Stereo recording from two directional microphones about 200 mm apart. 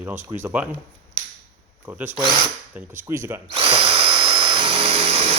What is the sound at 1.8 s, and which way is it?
A man's voice, 10° right (ahead or behind).